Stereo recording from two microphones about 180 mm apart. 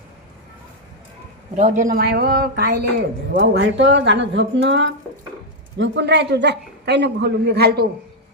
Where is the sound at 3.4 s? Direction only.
80° right.